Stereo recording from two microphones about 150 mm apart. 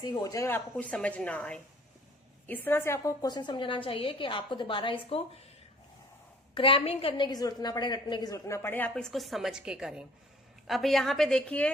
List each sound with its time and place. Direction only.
0.0 s a woman's voice: 25° left (ahead or behind); by 5.5 s 40° left (ahead or behind)
6.5 s a woman's voice: 35° left (ahead or behind); by 11.7 s 10° left (ahead or behind)